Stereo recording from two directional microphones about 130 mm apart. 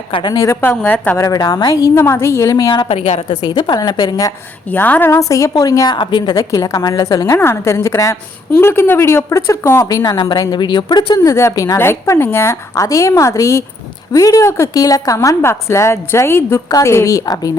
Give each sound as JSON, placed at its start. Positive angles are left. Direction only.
{"t": 0.1, "sound": "a woman's voice", "side_deg": 35}
{"t": 2.9, "sound": "a woman's voice", "side_deg": 50}
{"t": 3.4, "sound": "a woman's voice", "side_deg": 35}
{"t": 4.7, "sound": "a woman's voice", "side_deg": 15}
{"t": 10.0, "sound": "a woman's voice", "side_deg": 35}